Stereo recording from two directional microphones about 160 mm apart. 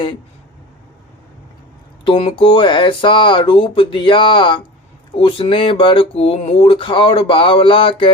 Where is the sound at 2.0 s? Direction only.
35° left (ahead or behind).